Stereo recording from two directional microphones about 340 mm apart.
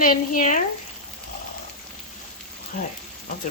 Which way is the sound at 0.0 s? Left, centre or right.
Left.